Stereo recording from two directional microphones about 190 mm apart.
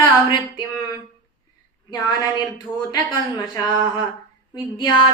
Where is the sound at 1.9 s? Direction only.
20° left (ahead or behind).